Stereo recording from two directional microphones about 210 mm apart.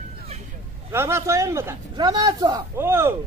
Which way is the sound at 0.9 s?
15° right (ahead or behind).